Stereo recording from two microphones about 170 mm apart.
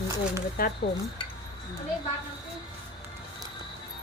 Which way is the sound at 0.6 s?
60° left (ahead or behind).